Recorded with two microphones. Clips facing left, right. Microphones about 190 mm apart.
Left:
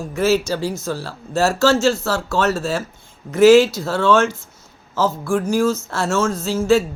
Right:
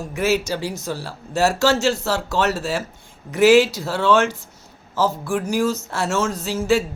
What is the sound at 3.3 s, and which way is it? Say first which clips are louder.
Speech: left 3 dB; 15° right (ahead or behind).